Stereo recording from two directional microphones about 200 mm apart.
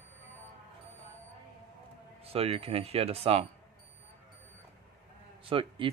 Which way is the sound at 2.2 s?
30° right (ahead or behind).